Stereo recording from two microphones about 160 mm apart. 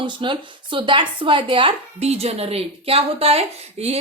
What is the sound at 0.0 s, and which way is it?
Speech, 30° right (ahead or behind).